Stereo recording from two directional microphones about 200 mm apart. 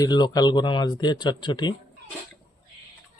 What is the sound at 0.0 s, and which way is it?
Speech, 20° left (ahead or behind).